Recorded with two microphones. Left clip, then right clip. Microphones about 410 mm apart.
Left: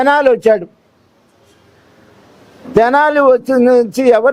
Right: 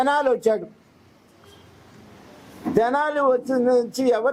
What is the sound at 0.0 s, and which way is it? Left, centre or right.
Speech, left.